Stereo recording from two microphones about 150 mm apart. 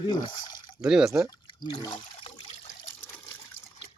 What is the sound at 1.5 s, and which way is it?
Speech, 35° left (ahead or behind).